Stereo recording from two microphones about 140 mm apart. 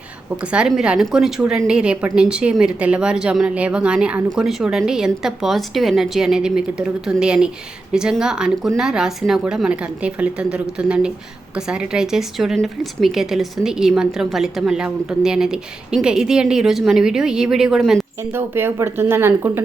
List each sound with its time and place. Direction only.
0.5 s a woman's voice: 5° right (ahead or behind)
18.3 s speech: 15° right (ahead or behind)